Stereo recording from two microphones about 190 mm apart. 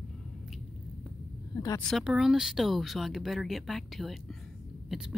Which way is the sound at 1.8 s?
Centre (ahead or behind).